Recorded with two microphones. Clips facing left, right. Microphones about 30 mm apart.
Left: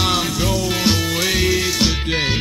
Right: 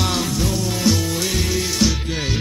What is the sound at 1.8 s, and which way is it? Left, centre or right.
Music, left.